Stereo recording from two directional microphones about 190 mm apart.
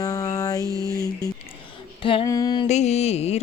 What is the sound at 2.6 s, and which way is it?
Mantra, 35° left (ahead or behind).